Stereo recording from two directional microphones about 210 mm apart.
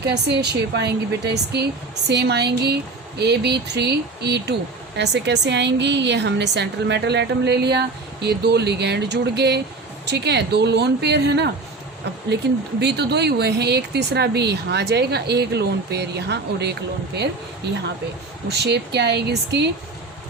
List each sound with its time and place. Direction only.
0.0 s a woman's voice: 50° right (ahead or behind)
12.8 s a woman's voice: 55° right (ahead or behind)
18.4 s a woman's voice: 50° right (ahead or behind)